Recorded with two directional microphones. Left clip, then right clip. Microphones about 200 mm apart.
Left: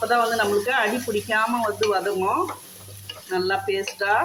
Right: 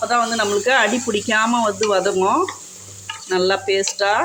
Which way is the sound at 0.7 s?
40° right (ahead or behind).